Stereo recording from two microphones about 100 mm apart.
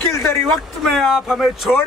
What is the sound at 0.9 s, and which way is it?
Speech, centre (ahead or behind).